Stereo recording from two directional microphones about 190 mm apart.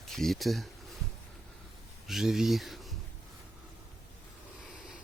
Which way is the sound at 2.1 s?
Centre (ahead or behind).